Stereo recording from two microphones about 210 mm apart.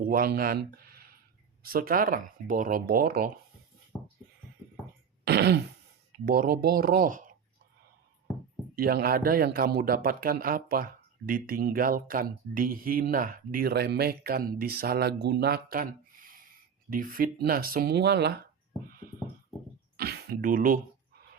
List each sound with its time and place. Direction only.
0.0 s speech: 45° right (ahead or behind)
5.2 s throat clearing: 50° right (ahead or behind)
6.2 s speech: 45° right (ahead or behind)
8.7 s speech: 45° right (ahead or behind)
20.0 s a sound: 50° right (ahead or behind)